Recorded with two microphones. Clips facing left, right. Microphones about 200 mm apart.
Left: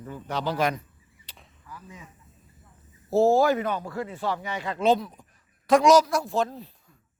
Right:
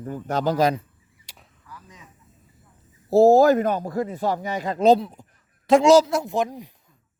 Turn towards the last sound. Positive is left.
turn(degrees=-15)  # may be behind; listen again after turning